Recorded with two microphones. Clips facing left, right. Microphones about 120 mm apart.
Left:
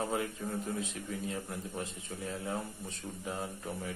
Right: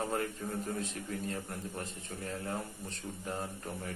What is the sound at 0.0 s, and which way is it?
A man's voice, 5° left (ahead or behind).